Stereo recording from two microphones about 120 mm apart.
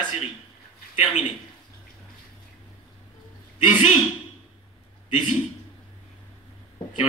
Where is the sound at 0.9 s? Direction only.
70° left (ahead or behind).